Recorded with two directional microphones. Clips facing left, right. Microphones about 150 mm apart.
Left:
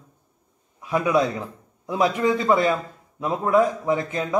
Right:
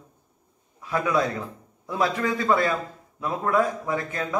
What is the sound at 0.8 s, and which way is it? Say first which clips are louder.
A man's voice: left 3 dB; 20° left (ahead or behind).